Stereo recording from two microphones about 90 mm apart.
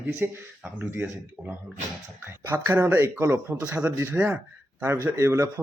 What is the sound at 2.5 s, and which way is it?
A man's voice, 25° right (ahead or behind).